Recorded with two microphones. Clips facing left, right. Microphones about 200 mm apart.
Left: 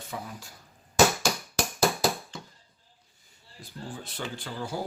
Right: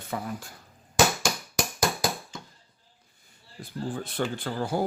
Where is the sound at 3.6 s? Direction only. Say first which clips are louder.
Right 7 dB; 55° right (ahead or behind).